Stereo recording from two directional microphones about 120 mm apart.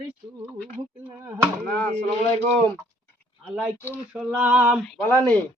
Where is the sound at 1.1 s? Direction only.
15° right (ahead or behind).